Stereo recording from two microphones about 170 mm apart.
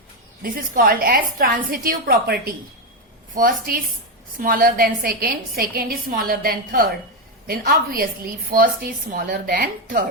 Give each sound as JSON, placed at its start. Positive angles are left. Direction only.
{"t": 0.4, "sound": "a woman's voice", "side_deg": -55}